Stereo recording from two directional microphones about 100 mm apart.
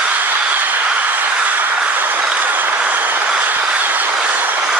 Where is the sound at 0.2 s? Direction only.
15° right (ahead or behind).